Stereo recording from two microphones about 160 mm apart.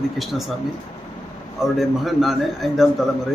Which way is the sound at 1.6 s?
Centre (ahead or behind).